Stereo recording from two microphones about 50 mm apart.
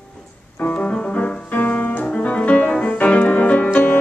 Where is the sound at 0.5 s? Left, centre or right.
Left.